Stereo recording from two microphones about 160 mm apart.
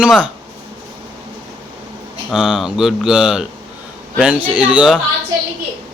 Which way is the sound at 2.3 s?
5° right (ahead or behind).